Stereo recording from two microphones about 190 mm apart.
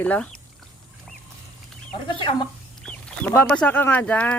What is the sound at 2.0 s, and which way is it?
Speech, 25° left (ahead or behind).